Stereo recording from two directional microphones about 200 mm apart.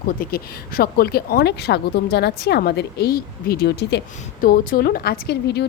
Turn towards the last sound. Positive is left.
turn(degrees=55)  # may be behind; listen again after turning